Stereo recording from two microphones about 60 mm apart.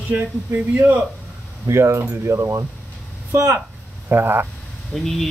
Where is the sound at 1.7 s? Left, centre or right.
Right.